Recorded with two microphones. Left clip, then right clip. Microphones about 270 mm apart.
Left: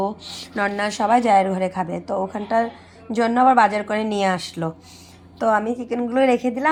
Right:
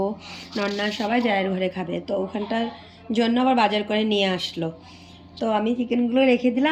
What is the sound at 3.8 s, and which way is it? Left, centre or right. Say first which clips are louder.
Speech: left 1 dB; left.